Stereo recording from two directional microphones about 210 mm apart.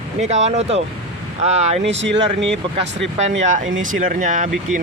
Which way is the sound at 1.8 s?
60° right (ahead or behind).